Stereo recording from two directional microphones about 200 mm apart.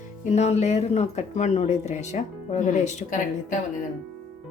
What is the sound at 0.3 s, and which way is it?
Speech, 35° left (ahead or behind).